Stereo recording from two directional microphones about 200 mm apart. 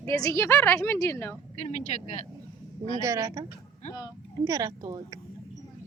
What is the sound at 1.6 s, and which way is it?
Speech, 35° left (ahead or behind).